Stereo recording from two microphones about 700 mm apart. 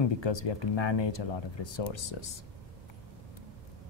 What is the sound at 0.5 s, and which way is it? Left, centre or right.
Speech, left.